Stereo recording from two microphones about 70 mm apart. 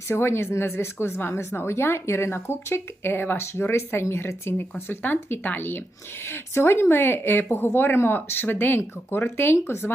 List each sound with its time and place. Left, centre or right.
0.1 s speech: left